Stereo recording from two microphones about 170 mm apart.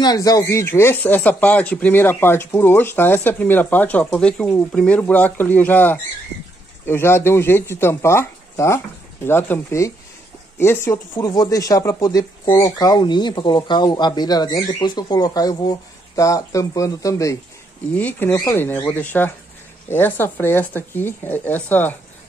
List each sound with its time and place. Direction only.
0.0 s speech: 20° left (ahead or behind)